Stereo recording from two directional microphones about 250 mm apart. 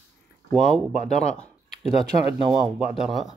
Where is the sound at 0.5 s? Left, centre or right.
Centre.